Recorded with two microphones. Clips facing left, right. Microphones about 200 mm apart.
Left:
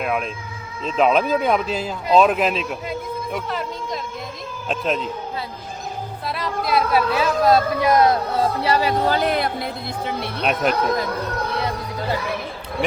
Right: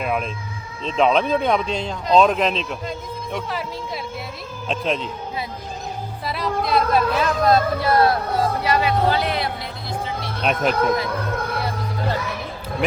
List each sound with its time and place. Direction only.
0.0 s speech: centre (ahead or behind)
6.2 s speech: centre (ahead or behind); by 8.2 s 20° left (ahead or behind)
8.6 s speech: 35° left (ahead or behind); by 9.6 s 50° left (ahead or behind)
10.4 s speech: centre (ahead or behind)